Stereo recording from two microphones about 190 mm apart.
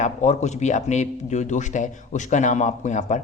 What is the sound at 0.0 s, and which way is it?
A man's voice, 40° left (ahead or behind).